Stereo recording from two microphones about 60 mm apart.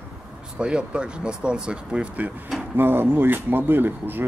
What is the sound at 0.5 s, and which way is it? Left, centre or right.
Speech, centre.